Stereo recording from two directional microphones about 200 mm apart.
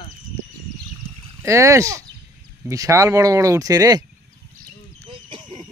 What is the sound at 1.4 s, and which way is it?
Speech, 15° right (ahead or behind).